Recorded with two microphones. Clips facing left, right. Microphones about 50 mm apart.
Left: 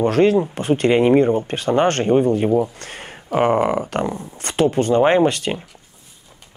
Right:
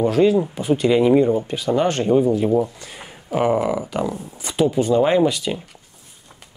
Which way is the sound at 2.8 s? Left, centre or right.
Left.